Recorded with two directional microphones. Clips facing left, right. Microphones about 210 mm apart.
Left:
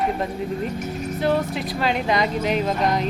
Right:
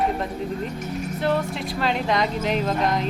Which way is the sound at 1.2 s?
Centre (ahead or behind).